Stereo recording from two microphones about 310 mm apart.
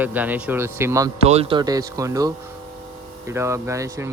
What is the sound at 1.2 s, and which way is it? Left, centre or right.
Speech, centre.